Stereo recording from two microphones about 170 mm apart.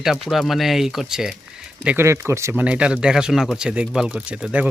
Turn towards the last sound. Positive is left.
turn(degrees=-5)  # may be behind; listen again after turning